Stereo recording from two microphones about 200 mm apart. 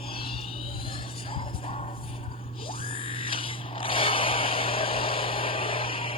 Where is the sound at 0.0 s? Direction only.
30° left (ahead or behind).